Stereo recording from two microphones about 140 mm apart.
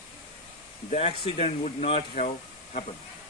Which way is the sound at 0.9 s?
50° left (ahead or behind).